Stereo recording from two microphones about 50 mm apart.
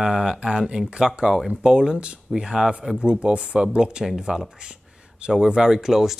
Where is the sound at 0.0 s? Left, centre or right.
Centre.